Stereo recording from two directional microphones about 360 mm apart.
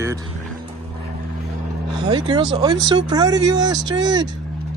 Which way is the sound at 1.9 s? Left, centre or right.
Centre.